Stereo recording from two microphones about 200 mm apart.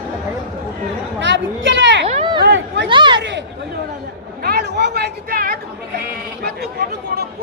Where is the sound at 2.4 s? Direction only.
55° right (ahead or behind).